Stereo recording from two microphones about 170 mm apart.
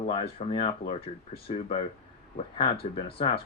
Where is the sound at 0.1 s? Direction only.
35° left (ahead or behind).